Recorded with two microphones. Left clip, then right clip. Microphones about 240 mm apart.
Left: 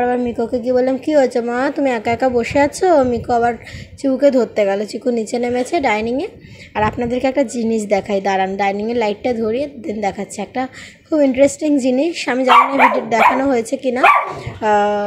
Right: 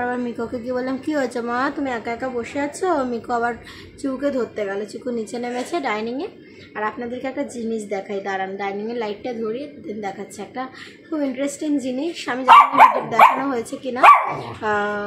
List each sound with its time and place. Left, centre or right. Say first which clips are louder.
0.0 s a woman's voice: left 7 dB; left
4.0 s a woman's voice: left 10 dB; left